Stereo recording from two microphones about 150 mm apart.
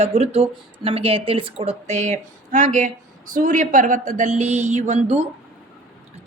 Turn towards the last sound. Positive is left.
turn(degrees=-45)  # may be behind; listen again after turning